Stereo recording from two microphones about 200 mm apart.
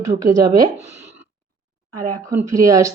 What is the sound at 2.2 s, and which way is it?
Speech, 15° right (ahead or behind).